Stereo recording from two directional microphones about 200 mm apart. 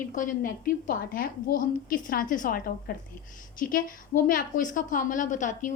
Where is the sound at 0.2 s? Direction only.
45° left (ahead or behind).